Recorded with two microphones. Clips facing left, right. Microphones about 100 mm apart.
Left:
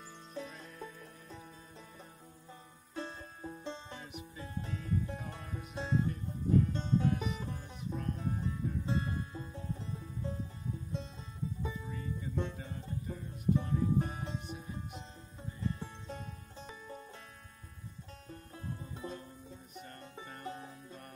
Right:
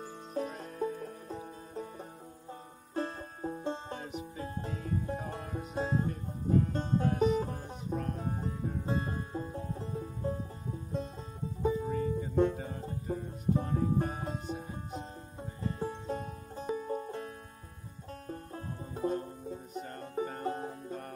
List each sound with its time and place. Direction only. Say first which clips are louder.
0.3 s music: right 8 dB; 45° right (ahead or behind)
2.9 s music: right 7 dB; 45° right (ahead or behind)
11.8 s music: right 9 dB; 45° right (ahead or behind)
18.2 s banjo: right 5 dB; 45° right (ahead or behind)
19.9 s music: right 15 dB; 45° right (ahead or behind)